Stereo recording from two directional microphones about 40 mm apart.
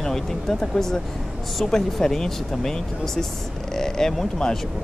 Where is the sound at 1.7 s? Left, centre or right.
Centre.